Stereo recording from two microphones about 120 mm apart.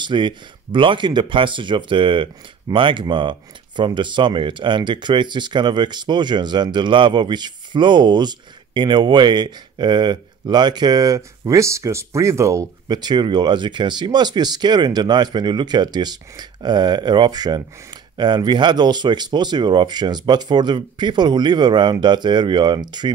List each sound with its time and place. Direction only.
0.0 s speech: 40° right (ahead or behind); by 12.6 s 25° right (ahead or behind)
12.8 s speech: 35° right (ahead or behind)